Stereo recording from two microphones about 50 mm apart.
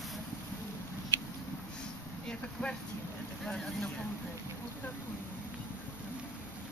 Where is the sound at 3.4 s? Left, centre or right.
Centre.